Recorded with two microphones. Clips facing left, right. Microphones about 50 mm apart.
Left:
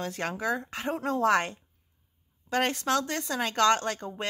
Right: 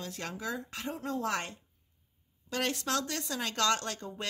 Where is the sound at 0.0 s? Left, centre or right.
Left.